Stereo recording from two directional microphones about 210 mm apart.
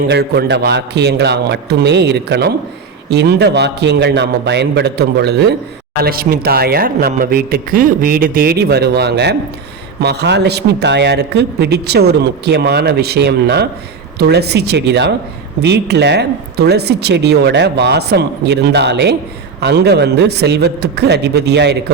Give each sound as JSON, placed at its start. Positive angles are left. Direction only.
{"t": 0.1, "sound": "a man's voice", "side_deg": -55}